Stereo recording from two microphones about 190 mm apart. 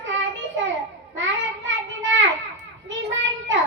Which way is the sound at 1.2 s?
75° right (ahead or behind).